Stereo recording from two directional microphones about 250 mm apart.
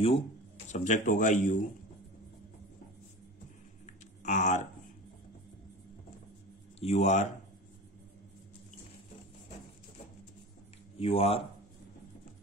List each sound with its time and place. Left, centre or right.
0.7 s speech: left
3.8 s a sound: left
6.8 s speech: left
11.0 s speech: left